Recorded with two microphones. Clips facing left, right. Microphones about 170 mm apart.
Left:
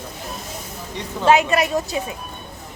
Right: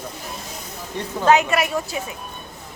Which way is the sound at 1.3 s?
25° left (ahead or behind).